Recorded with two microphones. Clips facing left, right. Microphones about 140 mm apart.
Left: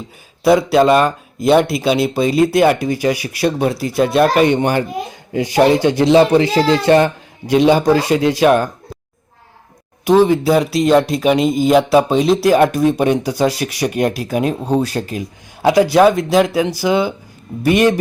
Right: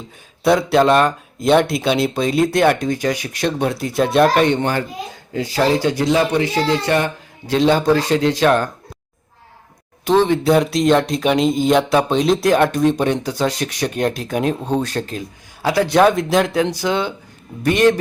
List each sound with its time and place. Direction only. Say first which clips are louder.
0.4 s speech: left 3 dB; 5° left (ahead or behind); by 6.5 s 30° left (ahead or behind)
6.5 s speech: left 4 dB; 90° left
6.8 s speech: left 7 dB; 30° left (ahead or behind)
7.4 s speech: left 3 dB; 10° left (ahead or behind)
10.0 s speech: left 3 dB; 10° left (ahead or behind)
15.9 s speech: left 2 dB; 5° left (ahead or behind)